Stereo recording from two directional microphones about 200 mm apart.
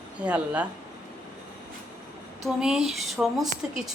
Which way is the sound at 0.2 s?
5° right (ahead or behind).